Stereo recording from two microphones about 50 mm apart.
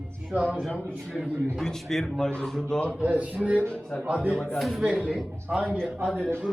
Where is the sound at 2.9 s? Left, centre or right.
Right.